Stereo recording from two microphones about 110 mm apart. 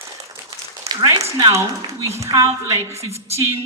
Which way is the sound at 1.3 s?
25° right (ahead or behind).